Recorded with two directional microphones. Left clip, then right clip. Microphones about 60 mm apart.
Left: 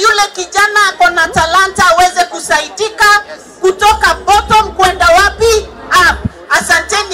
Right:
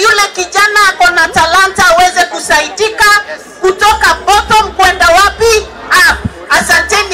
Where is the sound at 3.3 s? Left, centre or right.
Left.